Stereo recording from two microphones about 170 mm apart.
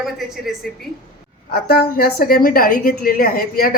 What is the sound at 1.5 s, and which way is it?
A woman's voice, 65° left (ahead or behind).